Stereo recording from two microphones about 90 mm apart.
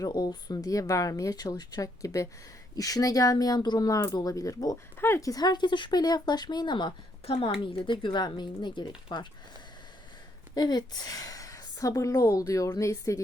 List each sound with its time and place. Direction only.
0.0 s a woman's voice: 50° left (ahead or behind)
4.9 s a sound: 25° left (ahead or behind)
5.2 s speech: 45° left (ahead or behind)
10.5 s a woman's voice: 50° left (ahead or behind)